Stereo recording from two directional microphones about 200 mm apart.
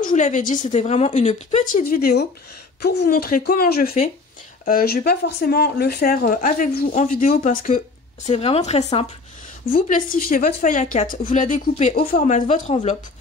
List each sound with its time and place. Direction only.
0.0 s speech: 40° left (ahead or behind)